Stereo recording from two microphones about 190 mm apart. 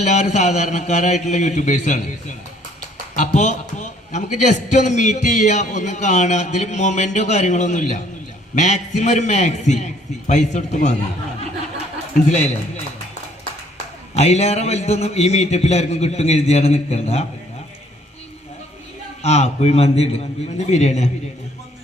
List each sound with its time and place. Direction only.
0.0 s a man's voice: 40° left (ahead or behind)
3.2 s a man's voice: 40° left (ahead or behind)
12.3 s a man's voice: 35° left (ahead or behind)
14.2 s a man's voice: 35° left (ahead or behind)
19.2 s a man's voice: 35° left (ahead or behind)